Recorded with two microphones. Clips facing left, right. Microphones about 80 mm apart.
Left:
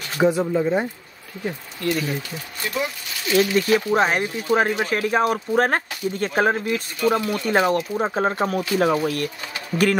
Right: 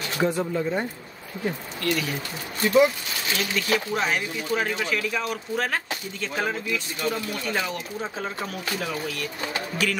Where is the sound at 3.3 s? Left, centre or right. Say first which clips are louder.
Left 9 dB; left.